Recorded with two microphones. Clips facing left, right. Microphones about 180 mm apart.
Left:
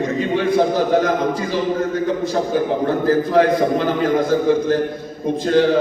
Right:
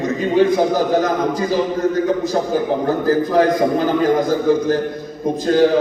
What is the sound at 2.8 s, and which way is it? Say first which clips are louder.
Speech: even; 40° right (ahead or behind).